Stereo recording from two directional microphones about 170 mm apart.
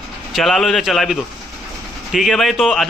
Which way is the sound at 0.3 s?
Centre (ahead or behind).